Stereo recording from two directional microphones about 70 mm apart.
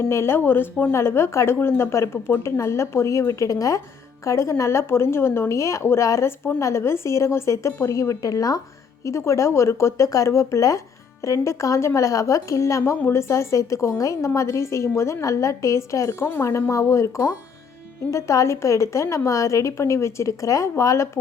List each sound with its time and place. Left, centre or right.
0.1 s a woman's voice: left
9.0 s a woman's voice: left
16.2 s a woman's voice: left